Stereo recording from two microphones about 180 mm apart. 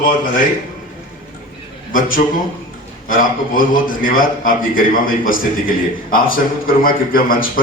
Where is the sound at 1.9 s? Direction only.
50° left (ahead or behind).